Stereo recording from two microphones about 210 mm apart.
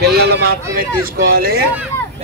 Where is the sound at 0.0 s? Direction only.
50° right (ahead or behind).